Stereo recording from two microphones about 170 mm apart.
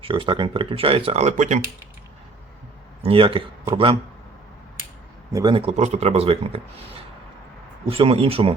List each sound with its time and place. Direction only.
0.0 s speech: 30° right (ahead or behind)
3.0 s speech: 35° right (ahead or behind)
5.3 s speech: 25° right (ahead or behind)
7.9 s speech: 35° right (ahead or behind)